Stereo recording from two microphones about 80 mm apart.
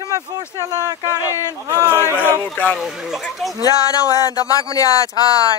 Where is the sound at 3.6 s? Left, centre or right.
Left.